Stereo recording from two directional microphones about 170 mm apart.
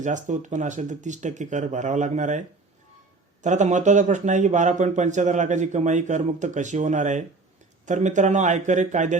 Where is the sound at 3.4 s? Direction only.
45° right (ahead or behind).